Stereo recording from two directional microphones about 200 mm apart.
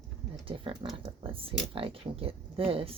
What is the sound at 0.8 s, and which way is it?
Speech, 25° right (ahead or behind).